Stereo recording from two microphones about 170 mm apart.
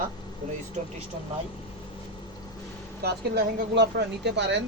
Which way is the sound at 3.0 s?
70° right (ahead or behind).